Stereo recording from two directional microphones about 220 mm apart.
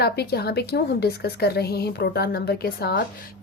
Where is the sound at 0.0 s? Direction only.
45° left (ahead or behind).